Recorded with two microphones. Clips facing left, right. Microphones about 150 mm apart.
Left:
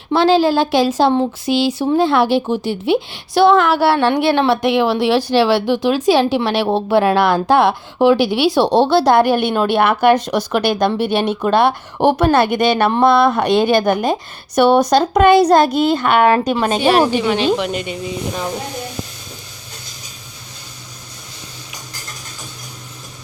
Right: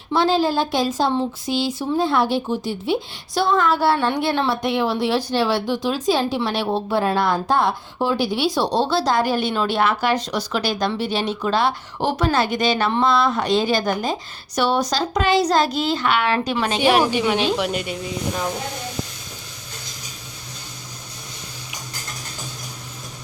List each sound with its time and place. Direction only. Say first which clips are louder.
0.1 s speech: left 6 dB; 85° left; by 16.9 s 45° left (ahead or behind)
17.2 s speech: left 4 dB; 10° right (ahead or behind)